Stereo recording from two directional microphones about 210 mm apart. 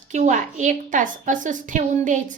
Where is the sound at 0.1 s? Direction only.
35° right (ahead or behind).